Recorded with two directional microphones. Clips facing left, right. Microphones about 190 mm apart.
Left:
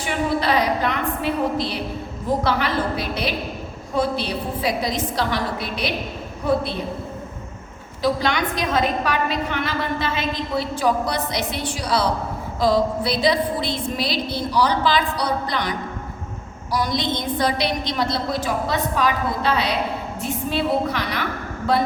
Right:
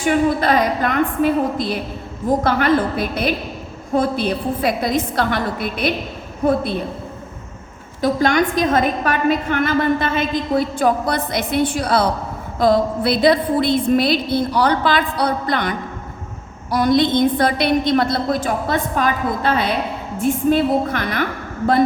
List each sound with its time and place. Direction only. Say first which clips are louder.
0.0 s a woman's voice: right 6 dB; 50° right (ahead or behind)
8.0 s a woman's voice: right 5 dB; 50° right (ahead or behind)
16.7 s a woman's voice: right 8 dB; 55° right (ahead or behind)